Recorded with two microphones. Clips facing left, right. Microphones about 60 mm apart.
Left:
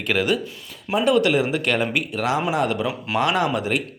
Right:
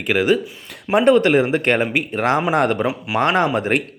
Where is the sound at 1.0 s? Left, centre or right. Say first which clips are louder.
Right 4 dB; right.